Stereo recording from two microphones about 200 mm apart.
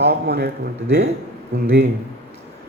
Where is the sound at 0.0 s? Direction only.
55° right (ahead or behind).